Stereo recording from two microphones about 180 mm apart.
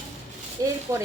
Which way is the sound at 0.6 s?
20° right (ahead or behind).